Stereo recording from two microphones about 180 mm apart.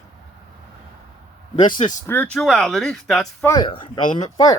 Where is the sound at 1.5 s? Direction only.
30° left (ahead or behind).